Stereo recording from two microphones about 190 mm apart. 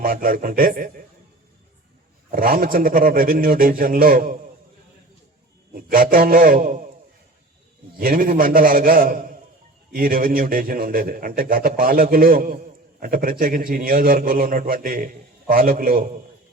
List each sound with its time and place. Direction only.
0.0 s a man's voice: 50° right (ahead or behind)
2.3 s a man's voice: 50° right (ahead or behind)
5.7 s a man's voice: 50° right (ahead or behind)
7.9 s a man's voice: 50° right (ahead or behind)